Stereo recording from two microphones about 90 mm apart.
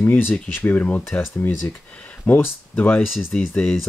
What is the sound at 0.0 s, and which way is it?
Speech, 25° left (ahead or behind).